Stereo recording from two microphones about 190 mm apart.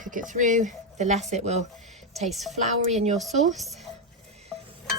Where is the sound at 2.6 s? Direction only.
35° right (ahead or behind).